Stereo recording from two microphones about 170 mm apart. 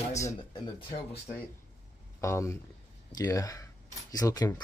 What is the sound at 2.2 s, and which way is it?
Speech, 15° left (ahead or behind).